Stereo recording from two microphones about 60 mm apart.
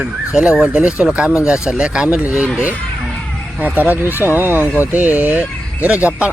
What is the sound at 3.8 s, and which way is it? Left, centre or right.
Speech, right.